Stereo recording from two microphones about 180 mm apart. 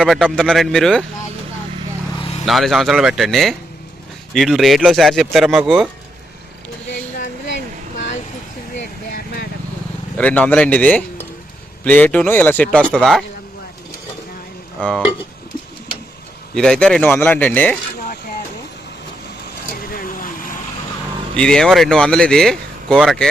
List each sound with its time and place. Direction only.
0.0 s speech: centre (ahead or behind)
2.5 s speech: centre (ahead or behind)
9.1 s vehicle: 55° left (ahead or behind)
10.2 s speech: 10° left (ahead or behind)
14.8 s speech: 5° right (ahead or behind)
16.6 s speech: 5° left (ahead or behind)
19.9 s vehicle: 50° left (ahead or behind)
21.3 s speech: 5° left (ahead or behind)